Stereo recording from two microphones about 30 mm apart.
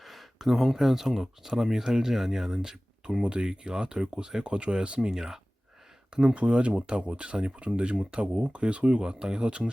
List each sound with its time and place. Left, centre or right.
0.0 s speech: centre
3.2 s speech: right
4.1 s speech: right
4.4 s speech: right
4.9 s speech: centre
6.3 s speech: right